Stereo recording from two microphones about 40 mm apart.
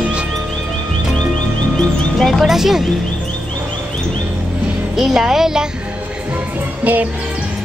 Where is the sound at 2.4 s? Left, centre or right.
Centre.